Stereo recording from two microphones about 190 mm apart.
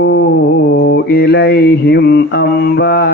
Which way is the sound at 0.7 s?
60° left (ahead or behind).